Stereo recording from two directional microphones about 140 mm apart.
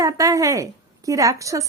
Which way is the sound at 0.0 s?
25° right (ahead or behind).